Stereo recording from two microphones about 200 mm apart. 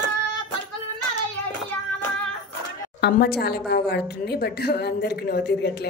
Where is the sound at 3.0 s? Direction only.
50° left (ahead or behind).